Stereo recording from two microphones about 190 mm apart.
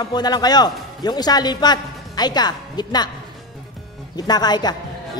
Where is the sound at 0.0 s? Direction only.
20° left (ahead or behind).